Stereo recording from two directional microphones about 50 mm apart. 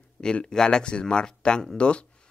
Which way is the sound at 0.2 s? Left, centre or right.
Centre.